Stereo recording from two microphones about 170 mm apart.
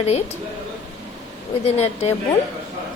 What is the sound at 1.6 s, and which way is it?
Speech, 35° left (ahead or behind).